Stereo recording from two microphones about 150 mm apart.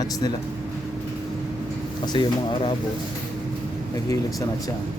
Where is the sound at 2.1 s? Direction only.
30° left (ahead or behind).